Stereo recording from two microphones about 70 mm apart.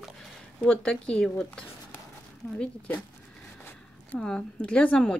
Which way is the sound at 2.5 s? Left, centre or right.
Left.